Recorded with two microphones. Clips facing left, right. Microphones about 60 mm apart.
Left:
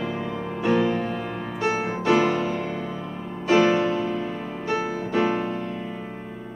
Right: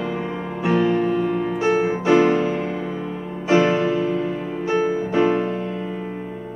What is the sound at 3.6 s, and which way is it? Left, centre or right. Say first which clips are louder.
Music: right 2 dB; centre.